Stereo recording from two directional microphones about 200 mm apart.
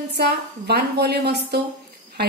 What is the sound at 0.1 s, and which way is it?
A woman's voice, 55° right (ahead or behind).